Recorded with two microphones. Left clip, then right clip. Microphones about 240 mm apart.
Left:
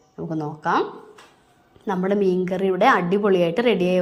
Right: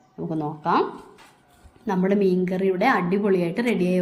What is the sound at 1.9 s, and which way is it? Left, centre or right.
Speech, left.